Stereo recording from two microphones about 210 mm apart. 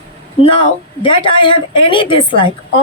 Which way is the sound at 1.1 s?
25° left (ahead or behind).